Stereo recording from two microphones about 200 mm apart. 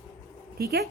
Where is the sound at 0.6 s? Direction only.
50° right (ahead or behind).